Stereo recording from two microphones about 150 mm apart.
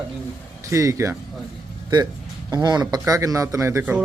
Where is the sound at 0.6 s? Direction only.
20° right (ahead or behind).